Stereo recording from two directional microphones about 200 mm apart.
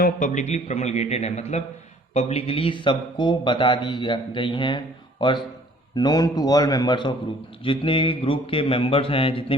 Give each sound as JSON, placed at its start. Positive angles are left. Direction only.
{"t": 0.0, "sound": "a man's voice", "side_deg": 40}